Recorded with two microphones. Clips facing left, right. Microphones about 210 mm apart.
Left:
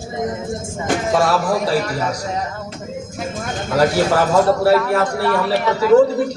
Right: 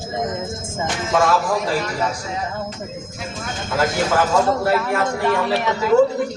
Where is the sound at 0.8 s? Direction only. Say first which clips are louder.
Left 2 dB; 45° left (ahead or behind).